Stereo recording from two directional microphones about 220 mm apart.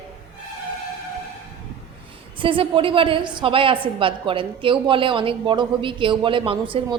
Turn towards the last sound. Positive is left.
turn(degrees=-25)  # may be behind; listen again after turning